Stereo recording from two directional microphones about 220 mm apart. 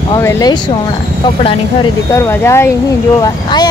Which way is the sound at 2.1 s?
10° left (ahead or behind).